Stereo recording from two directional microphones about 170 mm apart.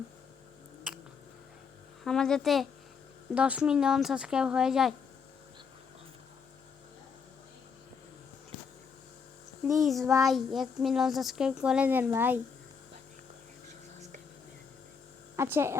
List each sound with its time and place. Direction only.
0.9 s a sound: 5° right (ahead or behind)
2.0 s speech: 5° left (ahead or behind)
9.6 s speech: centre (ahead or behind)
15.4 s speech: 15° right (ahead or behind)